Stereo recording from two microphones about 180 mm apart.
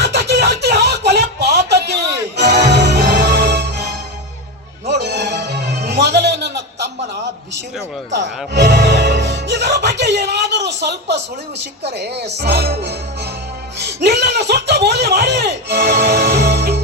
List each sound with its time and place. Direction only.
0.0 s a sound: 70° right (ahead or behind)
2.3 s music: 70° right (ahead or behind)
4.9 s music: 65° right (ahead or behind)
8.1 s music: 70° right (ahead or behind)
11.9 s speech: 65° right (ahead or behind)